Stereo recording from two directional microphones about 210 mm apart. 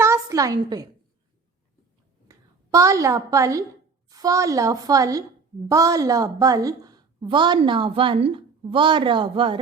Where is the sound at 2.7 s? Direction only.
15° right (ahead or behind).